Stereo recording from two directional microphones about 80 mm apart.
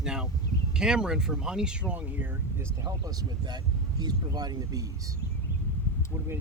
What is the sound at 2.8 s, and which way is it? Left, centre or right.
Speech, right.